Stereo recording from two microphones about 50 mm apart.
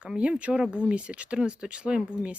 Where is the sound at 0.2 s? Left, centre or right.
Right.